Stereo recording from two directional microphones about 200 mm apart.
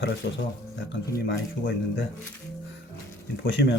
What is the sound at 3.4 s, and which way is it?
Speech, 55° left (ahead or behind).